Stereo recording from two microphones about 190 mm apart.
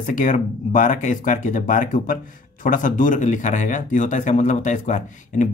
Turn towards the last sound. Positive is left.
turn(degrees=40)  # may be behind; listen again after turning